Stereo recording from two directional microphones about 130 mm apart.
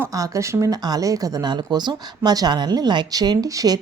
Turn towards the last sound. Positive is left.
turn(degrees=-30)  # may be behind; listen again after turning